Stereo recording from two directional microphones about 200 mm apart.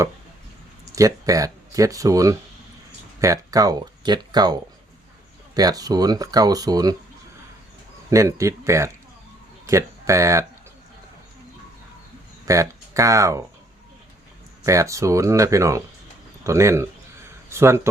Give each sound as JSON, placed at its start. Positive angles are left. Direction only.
{"t": 0.9, "sound": "speech", "side_deg": -15}
{"t": 5.5, "sound": "speech", "side_deg": -20}
{"t": 8.1, "sound": "speech", "side_deg": -15}
{"t": 12.5, "sound": "speech", "side_deg": -15}
{"t": 14.6, "sound": "speech", "side_deg": -15}